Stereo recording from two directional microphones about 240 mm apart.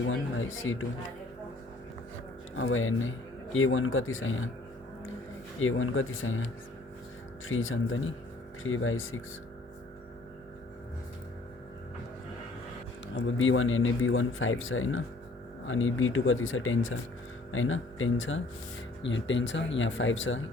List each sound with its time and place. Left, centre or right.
0.1 s speech: left
2.6 s speech: left
5.5 s speech: left
13.1 s speech: left